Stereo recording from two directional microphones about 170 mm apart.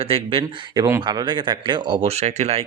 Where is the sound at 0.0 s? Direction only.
30° right (ahead or behind).